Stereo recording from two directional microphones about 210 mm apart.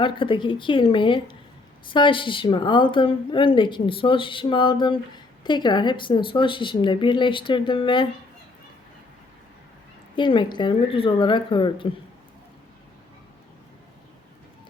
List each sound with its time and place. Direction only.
0.0 s a woman's voice: 25° left (ahead or behind)
10.2 s a woman's voice: 20° left (ahead or behind)